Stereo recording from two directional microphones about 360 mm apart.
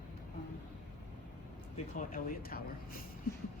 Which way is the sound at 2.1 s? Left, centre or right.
Left.